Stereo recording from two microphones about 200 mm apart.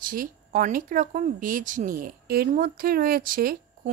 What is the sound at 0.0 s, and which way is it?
A woman's voice, 45° right (ahead or behind).